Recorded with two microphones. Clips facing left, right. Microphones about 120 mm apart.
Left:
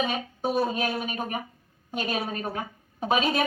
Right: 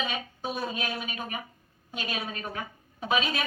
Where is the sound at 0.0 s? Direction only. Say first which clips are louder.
Left 5 dB; 45° left (ahead or behind).